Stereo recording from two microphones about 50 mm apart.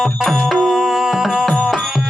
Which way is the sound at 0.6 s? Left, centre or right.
Centre.